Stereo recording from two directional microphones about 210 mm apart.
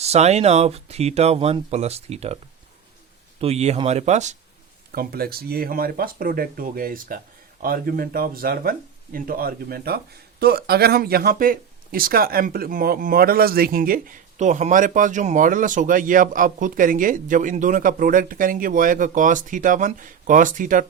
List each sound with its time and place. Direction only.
0.0 s speech: 30° right (ahead or behind)
3.4 s speech: 30° right (ahead or behind)
4.9 s speech: 45° right (ahead or behind)